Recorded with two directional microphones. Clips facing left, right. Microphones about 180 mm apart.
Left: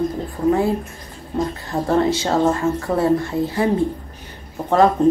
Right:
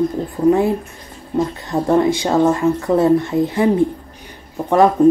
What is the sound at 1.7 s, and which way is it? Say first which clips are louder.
Speech: right 3 dB; 15° right (ahead or behind).